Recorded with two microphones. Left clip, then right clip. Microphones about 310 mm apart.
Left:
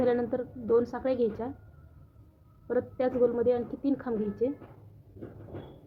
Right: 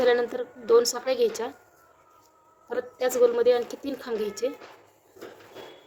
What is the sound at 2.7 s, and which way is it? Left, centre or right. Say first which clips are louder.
A woman's voice: right 2 dB; right.